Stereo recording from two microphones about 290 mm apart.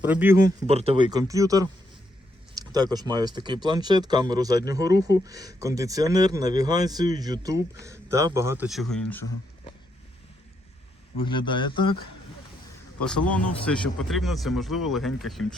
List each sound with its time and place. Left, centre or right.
0.0 s speech: centre
11.2 s speech: centre
13.1 s speech: centre